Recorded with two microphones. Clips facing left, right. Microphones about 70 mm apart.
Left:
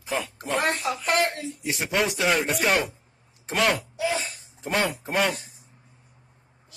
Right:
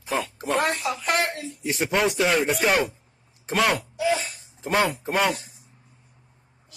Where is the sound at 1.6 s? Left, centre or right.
Centre.